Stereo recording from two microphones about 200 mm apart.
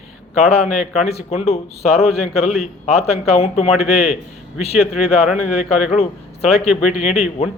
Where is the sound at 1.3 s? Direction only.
30° left (ahead or behind).